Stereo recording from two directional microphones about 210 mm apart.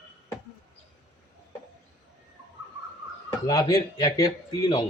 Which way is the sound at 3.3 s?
15° left (ahead or behind).